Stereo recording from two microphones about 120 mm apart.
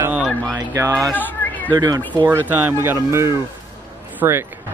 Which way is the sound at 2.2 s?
15° right (ahead or behind).